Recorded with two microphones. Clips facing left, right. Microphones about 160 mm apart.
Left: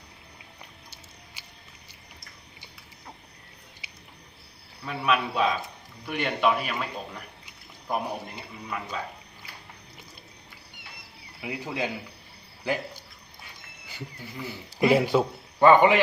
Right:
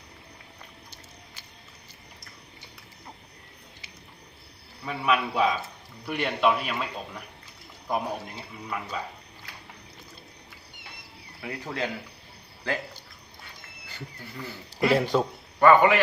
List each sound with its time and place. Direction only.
3.8 s a sound: 10° left (ahead or behind)
4.9 s a man's voice: 5° right (ahead or behind)
11.4 s speech: 10° left (ahead or behind)
13.8 s a man's voice: 10° left (ahead or behind)
15.6 s a man's voice: 20° left (ahead or behind)